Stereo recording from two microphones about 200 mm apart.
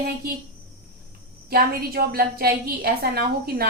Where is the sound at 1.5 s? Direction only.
50° right (ahead or behind).